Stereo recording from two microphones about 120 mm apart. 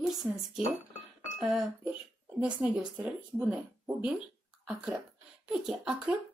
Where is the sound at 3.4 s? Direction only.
15° right (ahead or behind).